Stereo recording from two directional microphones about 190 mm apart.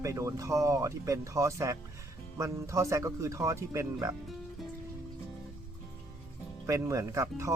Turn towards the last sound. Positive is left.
turn(degrees=-15)  # may be behind; listen again after turning